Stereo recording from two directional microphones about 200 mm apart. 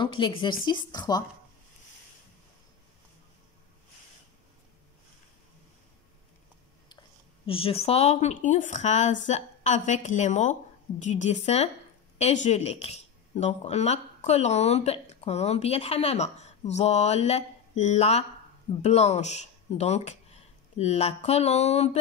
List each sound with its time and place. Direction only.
0.0 s speech: 25° left (ahead or behind)
7.4 s speech: 30° left (ahead or behind)